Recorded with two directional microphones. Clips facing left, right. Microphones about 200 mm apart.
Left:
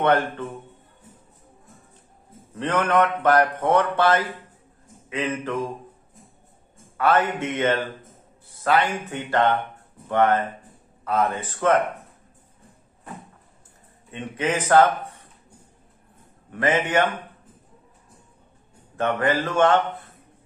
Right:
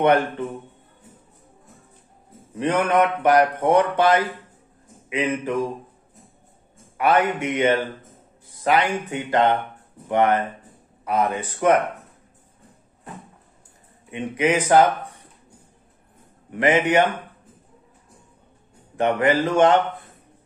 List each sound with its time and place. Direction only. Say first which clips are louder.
0.0 s speech: right 2 dB; 15° right (ahead or behind)
2.5 s speech: right 2 dB; 15° right (ahead or behind)
7.0 s speech: right 1 dB; 15° right (ahead or behind)
14.1 s speech: right 4 dB; 15° right (ahead or behind)
16.5 s speech: right 3 dB; 15° right (ahead or behind)
18.9 s speech: right 3 dB; 15° right (ahead or behind)